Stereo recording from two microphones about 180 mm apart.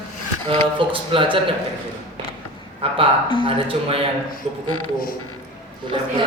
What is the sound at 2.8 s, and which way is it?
Speech, 30° right (ahead or behind).